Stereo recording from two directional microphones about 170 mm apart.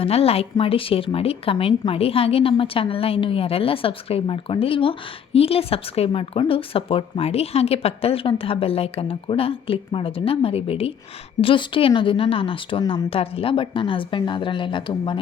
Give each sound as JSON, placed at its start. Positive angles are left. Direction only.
{"t": 0.0, "sound": "a woman's voice", "side_deg": 35}